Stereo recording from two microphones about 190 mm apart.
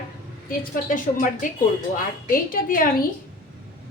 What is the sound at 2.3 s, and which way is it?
Speech, 45° left (ahead or behind).